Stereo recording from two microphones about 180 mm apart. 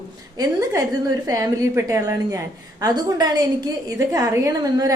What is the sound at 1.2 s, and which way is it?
A woman's voice, 20° right (ahead or behind).